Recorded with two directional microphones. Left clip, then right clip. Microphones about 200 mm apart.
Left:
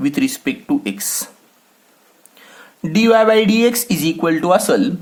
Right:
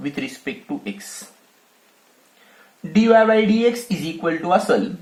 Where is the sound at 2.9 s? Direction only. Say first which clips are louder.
Left 2 dB; 45° left (ahead or behind).